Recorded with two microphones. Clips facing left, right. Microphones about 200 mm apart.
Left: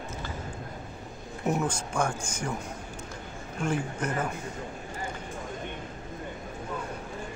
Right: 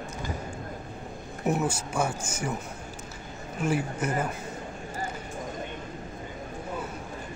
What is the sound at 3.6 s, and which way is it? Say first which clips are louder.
Speech: right 2 dB; 5° right (ahead or behind).